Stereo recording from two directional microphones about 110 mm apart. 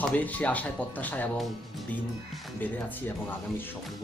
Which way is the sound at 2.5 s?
15° left (ahead or behind).